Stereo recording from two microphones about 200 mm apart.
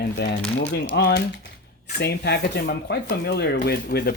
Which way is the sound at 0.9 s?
50° left (ahead or behind).